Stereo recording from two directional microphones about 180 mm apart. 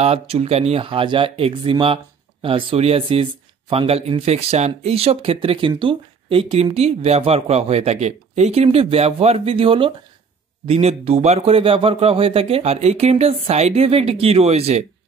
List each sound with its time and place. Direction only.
0.0 s speech: 35° right (ahead or behind)